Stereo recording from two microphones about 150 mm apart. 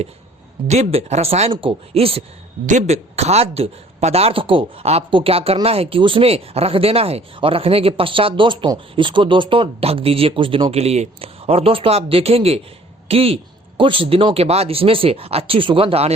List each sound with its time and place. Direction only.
0.7 s a woman's voice: 45° right (ahead or behind)
2.6 s speech: 50° right (ahead or behind)